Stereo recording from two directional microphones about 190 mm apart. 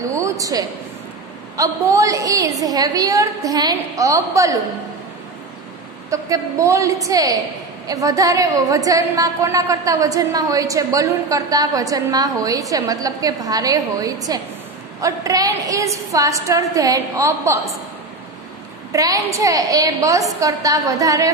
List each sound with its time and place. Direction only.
0.0 s a sound: 15° right (ahead or behind)
1.6 s a woman's voice: 15° right (ahead or behind)
6.0 s a woman's voice: 15° right (ahead or behind)
18.9 s a woman's voice: 20° right (ahead or behind)